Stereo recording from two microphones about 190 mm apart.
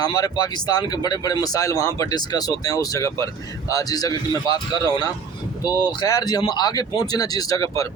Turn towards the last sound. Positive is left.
turn(degrees=20)  # may be behind; listen again after turning